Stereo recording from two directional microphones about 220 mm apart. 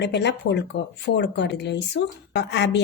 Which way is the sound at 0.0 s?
50° left (ahead or behind).